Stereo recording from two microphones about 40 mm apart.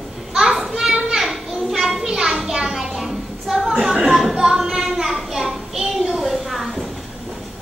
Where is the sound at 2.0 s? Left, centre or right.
Centre.